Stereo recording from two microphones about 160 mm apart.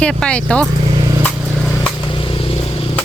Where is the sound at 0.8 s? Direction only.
30° right (ahead or behind).